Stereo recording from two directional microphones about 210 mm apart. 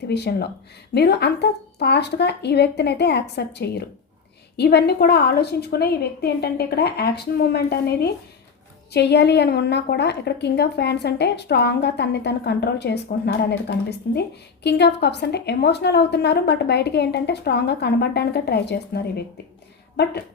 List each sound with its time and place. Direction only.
0.1 s a woman's voice: 50° left (ahead or behind)